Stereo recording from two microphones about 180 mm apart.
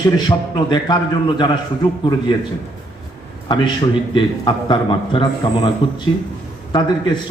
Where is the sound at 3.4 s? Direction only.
25° left (ahead or behind).